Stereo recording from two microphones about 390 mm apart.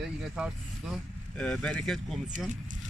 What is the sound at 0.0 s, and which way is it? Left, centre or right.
Speech, centre.